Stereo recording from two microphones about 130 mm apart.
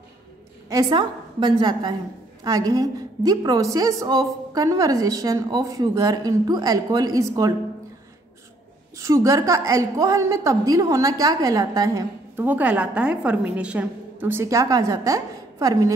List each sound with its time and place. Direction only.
0.7 s a woman's voice: 30° right (ahead or behind)
8.9 s a woman's voice: 25° right (ahead or behind)
12.4 s a woman's voice: 10° right (ahead or behind)